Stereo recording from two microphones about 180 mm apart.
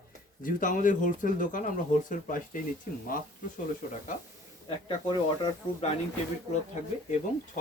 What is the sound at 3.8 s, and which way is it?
Speech, 45° left (ahead or behind).